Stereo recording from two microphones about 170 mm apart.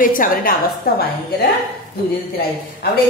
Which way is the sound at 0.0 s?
55° left (ahead or behind).